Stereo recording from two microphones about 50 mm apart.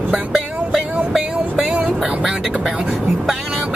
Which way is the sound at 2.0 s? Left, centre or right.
Centre.